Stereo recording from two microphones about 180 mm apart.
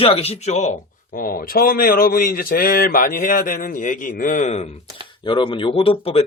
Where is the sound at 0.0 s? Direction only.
35° left (ahead or behind).